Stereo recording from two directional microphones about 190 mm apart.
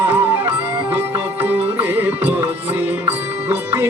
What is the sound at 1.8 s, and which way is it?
Music, 10° right (ahead or behind).